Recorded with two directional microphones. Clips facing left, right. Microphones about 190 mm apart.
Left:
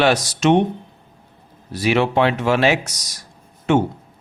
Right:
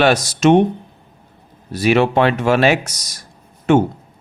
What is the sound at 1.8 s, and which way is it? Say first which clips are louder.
Speech: right 3 dB; 50° right (ahead or behind).